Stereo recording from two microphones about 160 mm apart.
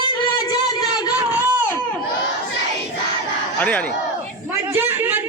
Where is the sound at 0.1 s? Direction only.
25° left (ahead or behind).